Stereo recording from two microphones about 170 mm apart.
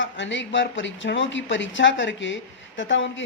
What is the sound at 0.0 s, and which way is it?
Speech, 90° left.